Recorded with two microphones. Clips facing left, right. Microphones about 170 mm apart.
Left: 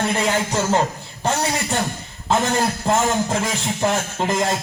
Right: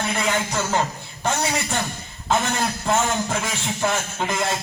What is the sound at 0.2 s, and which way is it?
Speech, 35° left (ahead or behind).